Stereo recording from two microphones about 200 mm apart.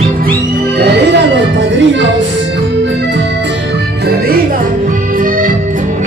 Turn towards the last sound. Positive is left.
turn(degrees=-45)  # may be behind; listen again after turning